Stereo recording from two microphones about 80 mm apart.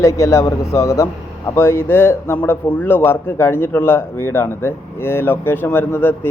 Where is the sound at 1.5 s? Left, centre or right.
Left.